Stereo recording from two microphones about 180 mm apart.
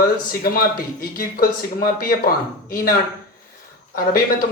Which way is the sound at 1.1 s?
55° left (ahead or behind).